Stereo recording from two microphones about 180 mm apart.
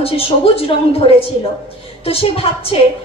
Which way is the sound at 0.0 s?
35° left (ahead or behind).